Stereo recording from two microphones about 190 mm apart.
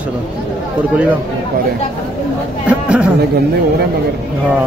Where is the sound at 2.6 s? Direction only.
5° right (ahead or behind).